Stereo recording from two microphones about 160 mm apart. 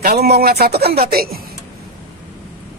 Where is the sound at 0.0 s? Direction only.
80° right.